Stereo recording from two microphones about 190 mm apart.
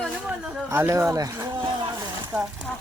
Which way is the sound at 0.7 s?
10° right (ahead or behind).